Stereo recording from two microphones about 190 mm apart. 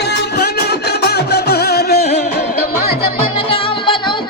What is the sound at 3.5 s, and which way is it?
Music, 25° left (ahead or behind).